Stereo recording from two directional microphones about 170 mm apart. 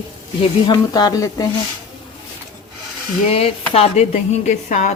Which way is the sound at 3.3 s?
35° left (ahead or behind).